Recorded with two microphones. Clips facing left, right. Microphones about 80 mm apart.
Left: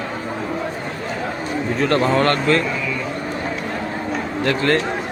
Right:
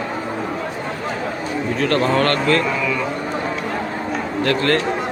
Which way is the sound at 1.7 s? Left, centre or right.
Left.